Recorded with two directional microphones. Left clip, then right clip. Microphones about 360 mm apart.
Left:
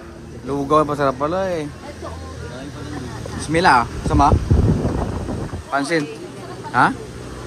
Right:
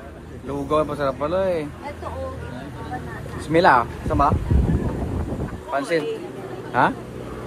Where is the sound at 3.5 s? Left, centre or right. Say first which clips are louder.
Left 1 dB; centre.